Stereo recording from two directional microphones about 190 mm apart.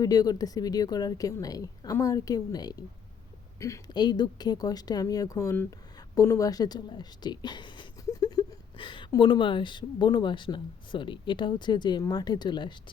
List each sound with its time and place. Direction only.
0.0 s speech: 20° left (ahead or behind)